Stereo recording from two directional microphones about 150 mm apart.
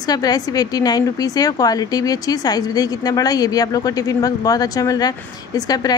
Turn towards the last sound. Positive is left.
turn(degrees=25)  # may be behind; listen again after turning